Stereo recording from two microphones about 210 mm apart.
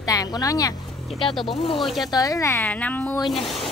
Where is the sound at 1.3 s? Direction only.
Centre (ahead or behind).